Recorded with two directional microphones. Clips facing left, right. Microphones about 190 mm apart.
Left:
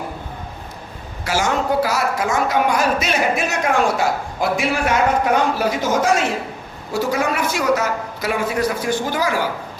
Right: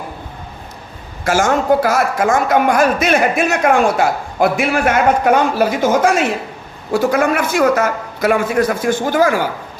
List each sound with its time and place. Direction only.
1.2 s a man's voice: 50° right (ahead or behind)